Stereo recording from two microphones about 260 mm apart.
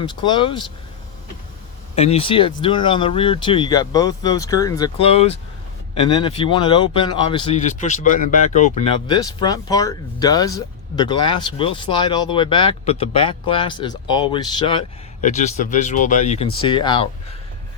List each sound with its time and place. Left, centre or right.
0.0 s a man's voice: centre
2.0 s a man's voice: left